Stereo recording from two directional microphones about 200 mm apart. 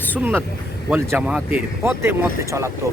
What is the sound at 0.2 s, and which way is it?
Speech, 10° right (ahead or behind).